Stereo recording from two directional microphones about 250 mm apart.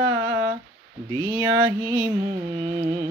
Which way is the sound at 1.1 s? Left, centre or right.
Centre.